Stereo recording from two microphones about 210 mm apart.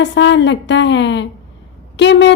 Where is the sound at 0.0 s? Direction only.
60° left (ahead or behind).